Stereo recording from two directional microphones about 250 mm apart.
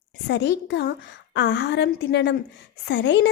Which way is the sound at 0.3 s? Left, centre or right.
Left.